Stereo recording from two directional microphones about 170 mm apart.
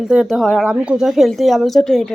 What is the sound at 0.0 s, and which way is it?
Speech, 5° right (ahead or behind).